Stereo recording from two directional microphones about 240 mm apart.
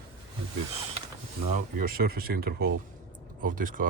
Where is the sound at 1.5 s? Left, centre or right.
Right.